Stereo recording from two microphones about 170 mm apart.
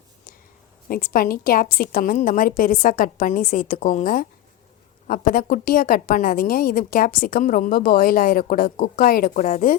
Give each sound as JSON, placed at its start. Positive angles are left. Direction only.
{"t": 0.9, "sound": "a woman's voice", "side_deg": 55}